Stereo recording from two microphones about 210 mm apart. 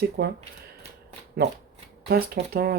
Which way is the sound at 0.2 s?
50° right (ahead or behind).